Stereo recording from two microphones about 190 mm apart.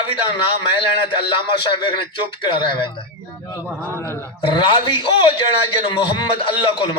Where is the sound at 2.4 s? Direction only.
25° left (ahead or behind).